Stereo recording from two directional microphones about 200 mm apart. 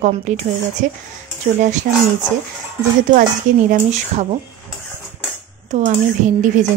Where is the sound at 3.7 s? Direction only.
35° right (ahead or behind).